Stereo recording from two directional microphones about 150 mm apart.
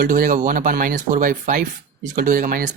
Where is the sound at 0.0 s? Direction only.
65° right (ahead or behind).